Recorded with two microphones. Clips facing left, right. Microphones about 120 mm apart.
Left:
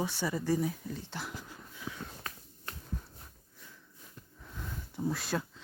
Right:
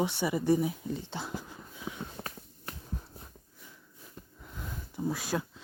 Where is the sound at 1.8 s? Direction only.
20° right (ahead or behind).